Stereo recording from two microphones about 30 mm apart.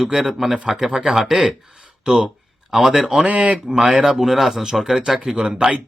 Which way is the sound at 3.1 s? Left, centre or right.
Right.